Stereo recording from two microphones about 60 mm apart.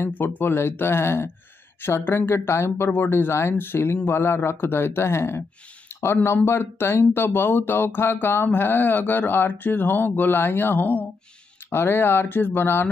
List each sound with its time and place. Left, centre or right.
0.4 s speech: left
2.9 s speech: left
5.9 s a sound: left
6.2 s speech: left